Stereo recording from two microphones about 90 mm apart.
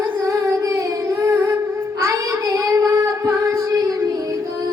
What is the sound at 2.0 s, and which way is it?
Child singing, 35° right (ahead or behind).